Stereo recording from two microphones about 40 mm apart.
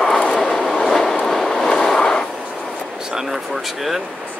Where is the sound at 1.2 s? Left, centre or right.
Centre.